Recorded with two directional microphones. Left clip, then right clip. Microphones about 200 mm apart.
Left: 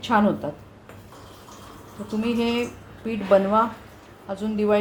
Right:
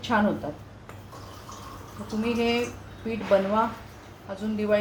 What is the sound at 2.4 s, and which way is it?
Speech, 45° left (ahead or behind).